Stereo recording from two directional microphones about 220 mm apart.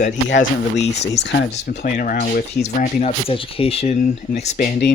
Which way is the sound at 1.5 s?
40° left (ahead or behind).